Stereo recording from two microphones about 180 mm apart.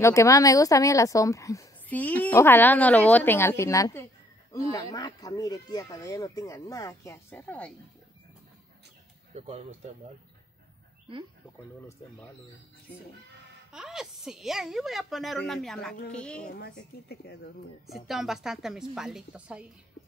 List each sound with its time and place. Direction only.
0.0 s a woman's voice: 15° left (ahead or behind)
9.3 s speech: 35° right (ahead or behind)
13.7 s a woman's voice: 5° right (ahead or behind)
16.5 s speech: 60° left (ahead or behind)
17.8 s a woman's voice: centre (ahead or behind)